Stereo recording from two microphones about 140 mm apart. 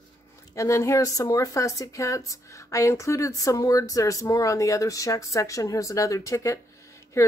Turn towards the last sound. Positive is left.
turn(degrees=20)  # may be behind; listen again after turning